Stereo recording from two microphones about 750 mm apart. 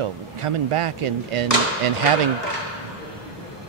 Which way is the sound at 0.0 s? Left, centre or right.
Right.